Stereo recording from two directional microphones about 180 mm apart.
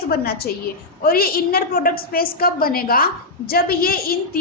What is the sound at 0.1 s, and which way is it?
A woman's voice, 60° left (ahead or behind).